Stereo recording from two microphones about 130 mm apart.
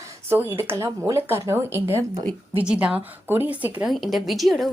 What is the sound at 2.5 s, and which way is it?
Speech, 10° right (ahead or behind).